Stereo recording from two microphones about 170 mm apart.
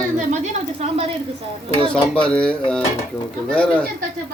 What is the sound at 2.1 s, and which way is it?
Speech, 5° left (ahead or behind).